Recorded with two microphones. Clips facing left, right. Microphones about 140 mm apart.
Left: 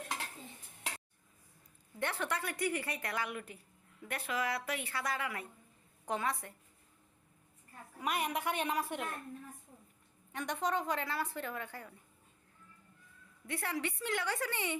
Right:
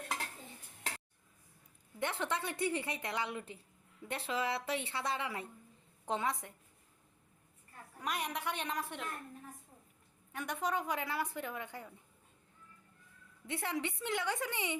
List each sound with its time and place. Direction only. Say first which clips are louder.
2.0 s a woman's voice: even; 20° right (ahead or behind)
7.9 s a woman's voice: left 3 dB; 5° left (ahead or behind)
10.3 s speech: left 1 dB; 5° right (ahead or behind)
13.5 s a woman's voice: even; 20° right (ahead or behind)